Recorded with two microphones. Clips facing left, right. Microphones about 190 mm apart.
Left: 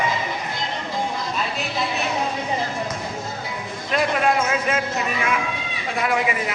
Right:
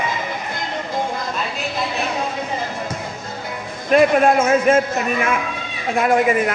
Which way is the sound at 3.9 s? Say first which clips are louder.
Right 7 dB; 45° right (ahead or behind).